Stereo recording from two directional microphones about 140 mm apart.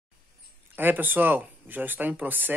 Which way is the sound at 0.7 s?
15° right (ahead or behind).